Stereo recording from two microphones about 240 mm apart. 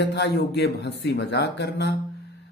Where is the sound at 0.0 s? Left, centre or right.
Left.